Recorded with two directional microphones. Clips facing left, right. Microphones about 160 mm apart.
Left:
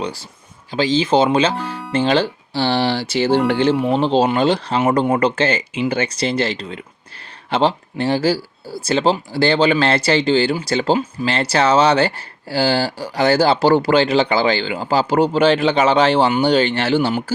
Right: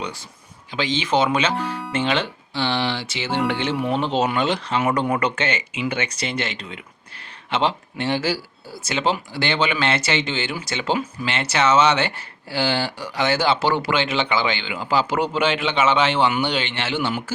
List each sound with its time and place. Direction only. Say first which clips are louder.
0.0 s speech: left 5 dB; 35° left (ahead or behind)